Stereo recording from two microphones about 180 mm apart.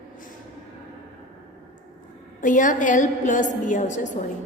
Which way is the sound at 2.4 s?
45° left (ahead or behind).